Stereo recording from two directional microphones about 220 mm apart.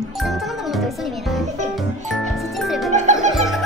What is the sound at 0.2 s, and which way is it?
Music, centre (ahead or behind).